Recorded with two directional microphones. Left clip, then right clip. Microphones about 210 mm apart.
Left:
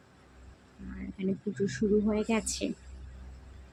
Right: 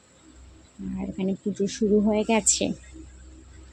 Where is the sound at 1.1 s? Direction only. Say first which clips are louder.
Right 4 dB; 20° right (ahead or behind).